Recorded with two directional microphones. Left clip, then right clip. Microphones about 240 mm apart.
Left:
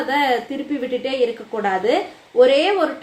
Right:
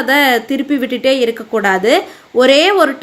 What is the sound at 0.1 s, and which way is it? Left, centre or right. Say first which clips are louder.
A woman's voice: right 8 dB; right.